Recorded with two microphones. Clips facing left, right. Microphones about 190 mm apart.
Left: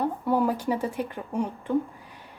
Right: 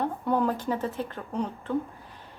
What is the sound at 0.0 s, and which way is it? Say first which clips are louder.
Speech: left 2 dB; 10° left (ahead or behind).